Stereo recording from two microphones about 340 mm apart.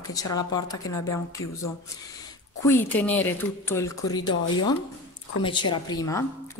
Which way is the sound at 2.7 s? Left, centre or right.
Centre.